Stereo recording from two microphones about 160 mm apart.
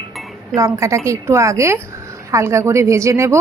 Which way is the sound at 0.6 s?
20° right (ahead or behind).